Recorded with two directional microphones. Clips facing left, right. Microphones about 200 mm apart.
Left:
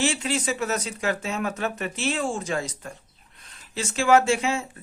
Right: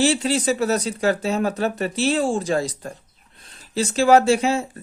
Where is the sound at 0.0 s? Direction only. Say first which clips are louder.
Right 6 dB; 35° right (ahead or behind).